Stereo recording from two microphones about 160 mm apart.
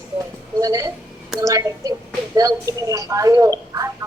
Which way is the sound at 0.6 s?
20° right (ahead or behind).